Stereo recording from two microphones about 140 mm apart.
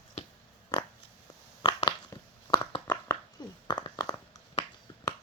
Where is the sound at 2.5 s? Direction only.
35° left (ahead or behind).